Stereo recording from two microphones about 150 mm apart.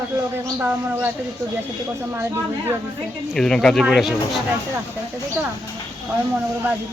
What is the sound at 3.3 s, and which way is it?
Speech, 5° left (ahead or behind).